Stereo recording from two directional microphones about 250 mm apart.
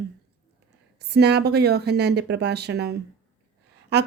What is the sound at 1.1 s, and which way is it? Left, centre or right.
A woman's voice, right.